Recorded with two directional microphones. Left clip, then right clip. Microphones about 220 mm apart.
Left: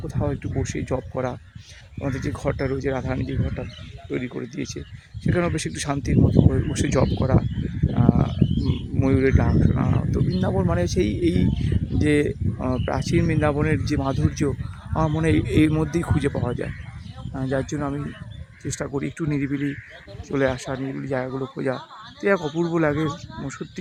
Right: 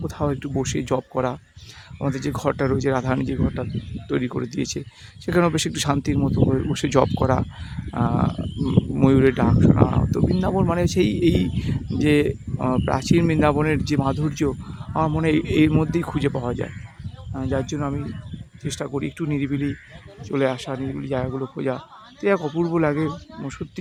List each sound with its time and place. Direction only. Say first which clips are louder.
0.0 s speech: right 3 dB; 25° right (ahead or behind); by 23.6 s 5° right (ahead or behind)